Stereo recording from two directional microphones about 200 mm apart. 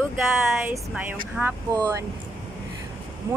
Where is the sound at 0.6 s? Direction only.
10° right (ahead or behind).